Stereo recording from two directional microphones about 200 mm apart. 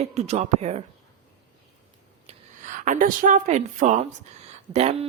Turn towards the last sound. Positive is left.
turn(degrees=-30)  # may be behind; listen again after turning